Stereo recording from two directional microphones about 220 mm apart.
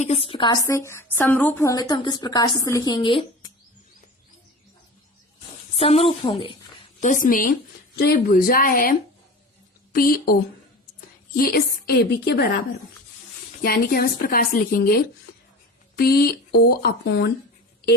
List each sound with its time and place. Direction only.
0.0 s a woman's voice: 30° left (ahead or behind)
5.7 s a woman's voice: 25° left (ahead or behind)
7.0 s speech: 35° left (ahead or behind)
11.3 s a woman's voice: 45° left (ahead or behind)
13.6 s a woman's voice: 45° left (ahead or behind)